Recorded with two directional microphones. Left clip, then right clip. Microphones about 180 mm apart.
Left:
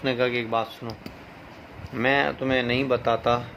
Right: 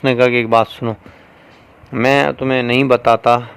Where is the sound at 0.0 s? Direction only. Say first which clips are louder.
Right 11 dB; 60° right (ahead or behind).